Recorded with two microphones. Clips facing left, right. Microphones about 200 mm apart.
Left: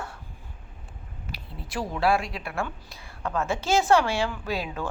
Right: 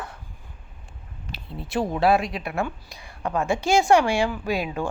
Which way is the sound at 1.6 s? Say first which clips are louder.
Right 5 dB; 25° right (ahead or behind).